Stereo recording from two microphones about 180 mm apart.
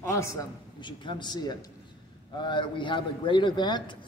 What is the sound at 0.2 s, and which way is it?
A man's voice, 20° left (ahead or behind).